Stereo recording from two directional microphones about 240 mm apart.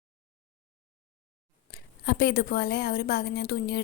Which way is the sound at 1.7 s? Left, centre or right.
Left.